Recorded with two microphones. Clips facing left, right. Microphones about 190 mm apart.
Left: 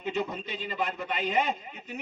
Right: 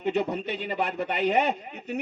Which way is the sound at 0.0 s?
65° right (ahead or behind).